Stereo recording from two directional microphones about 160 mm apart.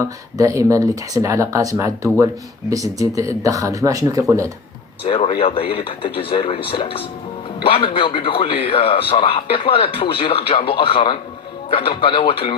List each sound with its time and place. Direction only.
0.3 s speech: 20° right (ahead or behind)
5.0 s a man's voice: 35° left (ahead or behind)